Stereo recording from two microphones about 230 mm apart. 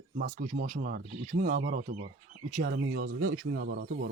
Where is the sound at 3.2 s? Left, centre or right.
Right.